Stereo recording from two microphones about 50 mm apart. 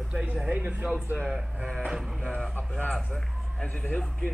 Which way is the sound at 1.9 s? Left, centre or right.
Centre.